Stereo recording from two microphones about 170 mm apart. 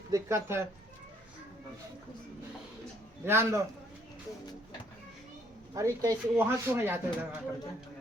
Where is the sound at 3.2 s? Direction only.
15° right (ahead or behind).